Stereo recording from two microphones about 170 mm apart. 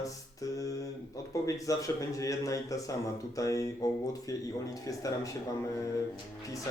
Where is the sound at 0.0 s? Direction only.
20° left (ahead or behind).